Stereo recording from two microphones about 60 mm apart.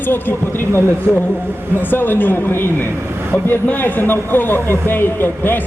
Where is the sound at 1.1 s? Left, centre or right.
Right.